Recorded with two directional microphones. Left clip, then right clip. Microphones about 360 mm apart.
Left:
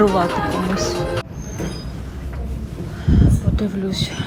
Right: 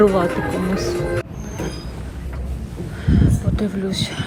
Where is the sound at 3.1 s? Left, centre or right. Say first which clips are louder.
Left 1 dB; centre.